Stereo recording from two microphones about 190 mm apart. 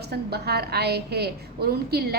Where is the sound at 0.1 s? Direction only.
55° right (ahead or behind).